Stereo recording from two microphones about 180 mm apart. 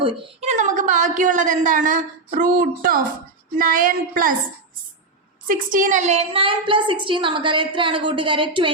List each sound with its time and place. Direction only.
0.0 s a woman's voice: 35° right (ahead or behind); by 4.4 s 50° right (ahead or behind)
5.5 s a woman's voice: 45° right (ahead or behind); by 8.7 s 30° right (ahead or behind)